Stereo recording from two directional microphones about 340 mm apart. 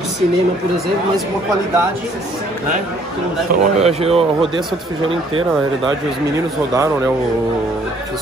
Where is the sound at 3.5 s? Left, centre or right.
Centre.